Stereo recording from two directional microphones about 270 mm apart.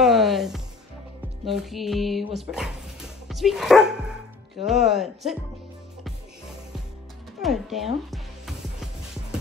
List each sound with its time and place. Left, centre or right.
0.0 s music: centre
1.4 s speech: centre
7.4 s speech: centre